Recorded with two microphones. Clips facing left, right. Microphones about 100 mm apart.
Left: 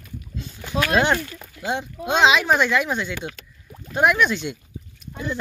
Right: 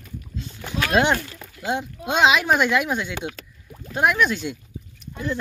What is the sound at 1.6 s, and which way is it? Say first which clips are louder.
Speech: even; 5° right (ahead or behind).